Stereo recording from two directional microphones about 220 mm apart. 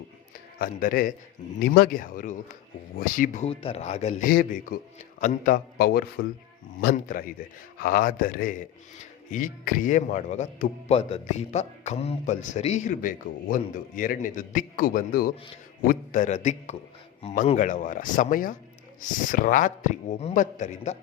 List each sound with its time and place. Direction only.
0.6 s speech: 40° left (ahead or behind)
4.3 s a man's voice: 45° left (ahead or behind)